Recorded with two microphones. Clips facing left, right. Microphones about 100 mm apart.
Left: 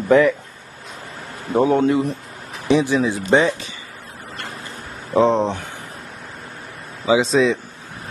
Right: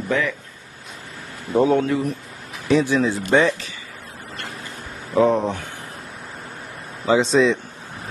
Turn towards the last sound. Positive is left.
turn(degrees=0)  # may be behind; listen again after turning